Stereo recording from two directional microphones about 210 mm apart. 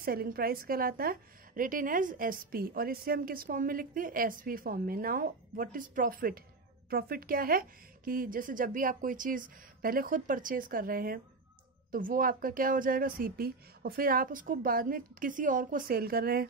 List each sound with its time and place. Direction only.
0.0 s a woman's voice: 45° right (ahead or behind)